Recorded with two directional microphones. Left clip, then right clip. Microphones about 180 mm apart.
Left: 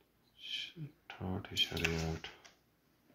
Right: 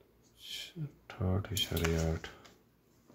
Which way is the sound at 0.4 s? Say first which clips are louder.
Left 1 dB; 35° right (ahead or behind).